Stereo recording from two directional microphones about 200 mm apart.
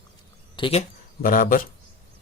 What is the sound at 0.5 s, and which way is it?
Speech, 25° left (ahead or behind).